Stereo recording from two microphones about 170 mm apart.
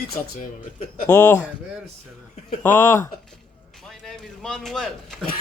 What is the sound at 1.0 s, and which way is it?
Speech, 15° left (ahead or behind).